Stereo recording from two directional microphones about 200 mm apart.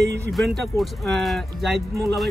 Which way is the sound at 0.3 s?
Centre (ahead or behind).